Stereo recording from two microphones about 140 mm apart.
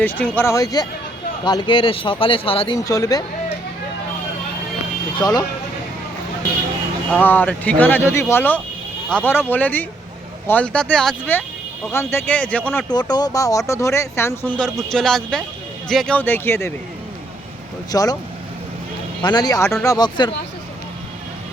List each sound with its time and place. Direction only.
0.0 s speech: 10° left (ahead or behind); by 2.7 s 40° left (ahead or behind)
2.7 s speech: 25° left (ahead or behind)
5.2 s speech: 25° left (ahead or behind)
7.1 s speech: 15° left (ahead or behind)
12.9 s speech: 30° left (ahead or behind)
17.9 s speech: 25° left (ahead or behind)
19.2 s speech: 30° left (ahead or behind)